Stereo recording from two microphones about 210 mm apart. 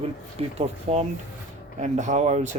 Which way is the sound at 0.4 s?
30° right (ahead or behind).